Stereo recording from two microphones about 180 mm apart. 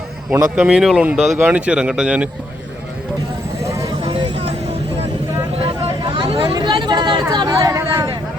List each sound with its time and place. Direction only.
0.5 s speech: 5° right (ahead or behind)
3.7 s clip-clop: 20° right (ahead or behind)
5.6 s vehicle: 30° right (ahead or behind)
6.3 s speech: 30° right (ahead or behind)